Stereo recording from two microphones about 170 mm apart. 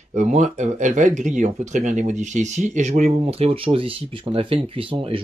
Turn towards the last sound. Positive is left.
turn(degrees=-30)  # may be behind; listen again after turning